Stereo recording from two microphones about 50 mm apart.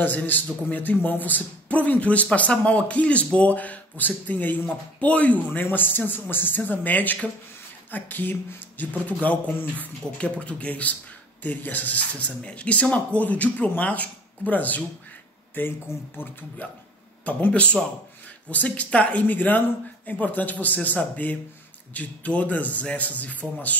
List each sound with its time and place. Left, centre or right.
0.0 s a man's voice: left
10.0 s speech: centre
10.4 s a man's voice: left
15.6 s speech: left
17.2 s a man's voice: left